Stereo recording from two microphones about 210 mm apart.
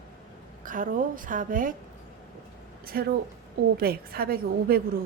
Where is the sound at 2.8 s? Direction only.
45° right (ahead or behind).